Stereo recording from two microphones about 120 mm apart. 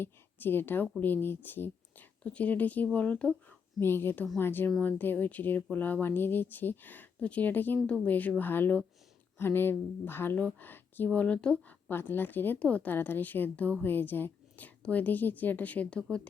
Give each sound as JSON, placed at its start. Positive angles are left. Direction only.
{"t": 0.0, "sound": "a woman's voice", "side_deg": 15}